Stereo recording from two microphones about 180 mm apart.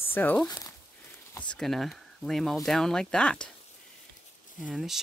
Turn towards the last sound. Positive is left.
turn(degrees=0)  # may be behind; listen again after turning